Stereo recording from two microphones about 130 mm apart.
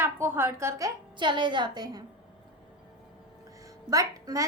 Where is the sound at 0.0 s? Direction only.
20° right (ahead or behind).